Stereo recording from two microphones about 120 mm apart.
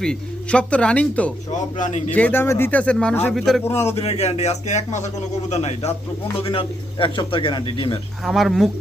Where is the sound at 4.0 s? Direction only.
60° left (ahead or behind).